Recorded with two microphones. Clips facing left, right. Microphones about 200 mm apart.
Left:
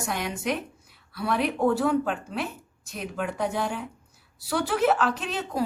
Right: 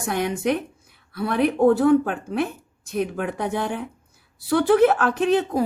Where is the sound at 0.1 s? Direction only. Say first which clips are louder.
Right 7 dB; 55° right (ahead or behind).